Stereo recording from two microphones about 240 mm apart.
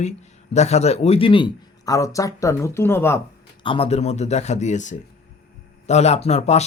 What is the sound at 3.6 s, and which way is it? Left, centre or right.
Speech, left.